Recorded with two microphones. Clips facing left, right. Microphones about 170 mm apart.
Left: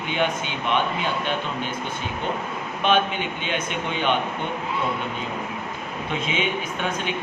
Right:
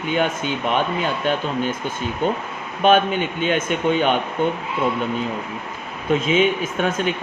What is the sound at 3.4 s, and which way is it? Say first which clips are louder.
Speech: right 7 dB; 50° right (ahead or behind).